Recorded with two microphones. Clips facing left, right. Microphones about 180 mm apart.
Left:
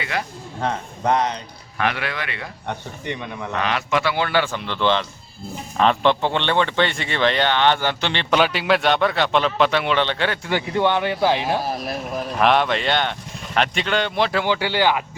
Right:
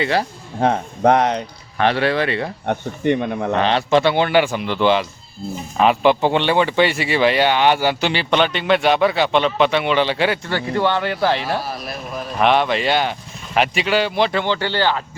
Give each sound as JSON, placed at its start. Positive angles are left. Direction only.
{"t": 0.0, "sound": "speech", "side_deg": -30}
{"t": 0.6, "sound": "speech", "side_deg": -60}
{"t": 1.8, "sound": "speech", "side_deg": -30}
{"t": 2.6, "sound": "speech", "side_deg": -55}
{"t": 3.5, "sound": "speech", "side_deg": -30}
{"t": 8.4, "sound": "speech", "side_deg": 5}
{"t": 10.4, "sound": "speech", "side_deg": 15}
{"t": 12.4, "sound": "speech", "side_deg": 0}